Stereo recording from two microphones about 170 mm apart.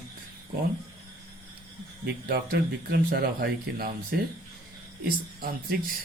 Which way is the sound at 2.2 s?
60° right (ahead or behind).